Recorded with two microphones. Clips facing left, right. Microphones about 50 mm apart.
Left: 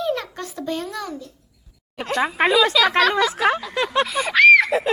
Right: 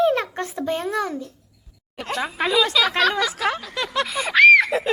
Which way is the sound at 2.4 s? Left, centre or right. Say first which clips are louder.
Left 5 dB; left.